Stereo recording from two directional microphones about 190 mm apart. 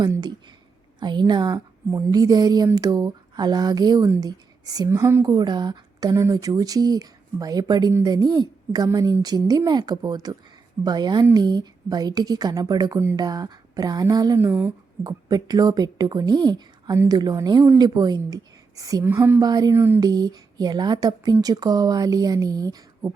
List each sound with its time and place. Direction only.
0.0 s a woman's voice: 20° right (ahead or behind)
15.0 s a woman's voice: 20° right (ahead or behind)